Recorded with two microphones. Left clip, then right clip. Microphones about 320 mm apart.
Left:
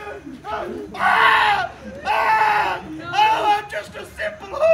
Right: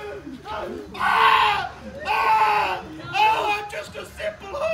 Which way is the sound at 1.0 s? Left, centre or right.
Centre.